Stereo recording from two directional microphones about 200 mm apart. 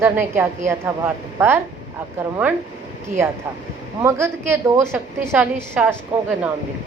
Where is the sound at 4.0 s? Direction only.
15° right (ahead or behind).